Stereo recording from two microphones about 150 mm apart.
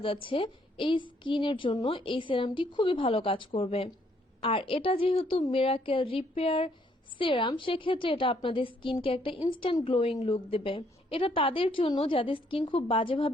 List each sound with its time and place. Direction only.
0.0 s a woman's voice: 35° left (ahead or behind)